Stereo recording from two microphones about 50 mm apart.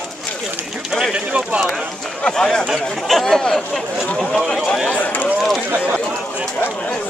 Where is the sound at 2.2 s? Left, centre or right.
Centre.